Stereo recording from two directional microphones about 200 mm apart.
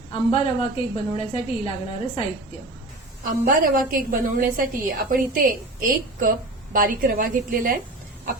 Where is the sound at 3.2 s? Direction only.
45° right (ahead or behind).